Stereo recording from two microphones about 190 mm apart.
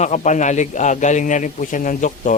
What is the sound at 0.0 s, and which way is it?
A man's voice, 40° left (ahead or behind).